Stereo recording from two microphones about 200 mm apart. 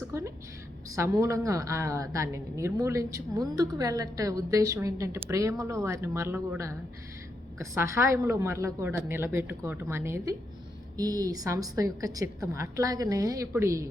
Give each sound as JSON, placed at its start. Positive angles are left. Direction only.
{"t": 0.1, "sound": "speech", "side_deg": -15}